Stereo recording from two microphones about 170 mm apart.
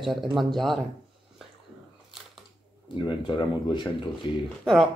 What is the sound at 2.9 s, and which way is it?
Speech, 30° left (ahead or behind).